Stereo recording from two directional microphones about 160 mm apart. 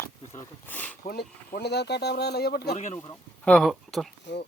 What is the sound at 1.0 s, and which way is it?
Speech, 70° left (ahead or behind).